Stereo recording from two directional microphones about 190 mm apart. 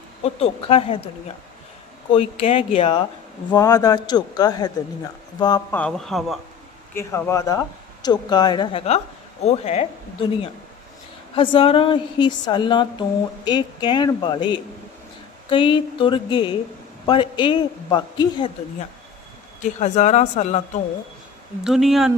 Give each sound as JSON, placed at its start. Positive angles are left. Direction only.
{"t": 0.3, "sound": "speech", "side_deg": 30}
{"t": 2.1, "sound": "a woman's voice", "side_deg": 30}
{"t": 3.5, "sound": "a woman's voice", "side_deg": 20}
{"t": 5.7, "sound": "speech", "side_deg": 5}
{"t": 6.9, "sound": "a woman's voice", "side_deg": 15}
{"t": 19.8, "sound": "speech", "side_deg": 35}
{"t": 21.6, "sound": "speech", "side_deg": 0}